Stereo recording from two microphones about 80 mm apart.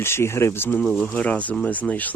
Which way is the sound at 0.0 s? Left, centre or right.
Left.